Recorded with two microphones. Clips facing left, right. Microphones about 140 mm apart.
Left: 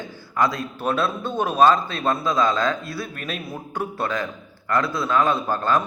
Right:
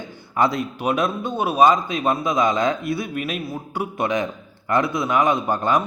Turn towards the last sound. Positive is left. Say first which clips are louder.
# right 1 dB
turn(degrees=-15)  # may be behind; listen again after turning